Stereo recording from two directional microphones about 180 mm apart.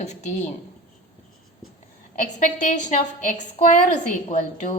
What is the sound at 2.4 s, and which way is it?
Speech, 45° left (ahead or behind).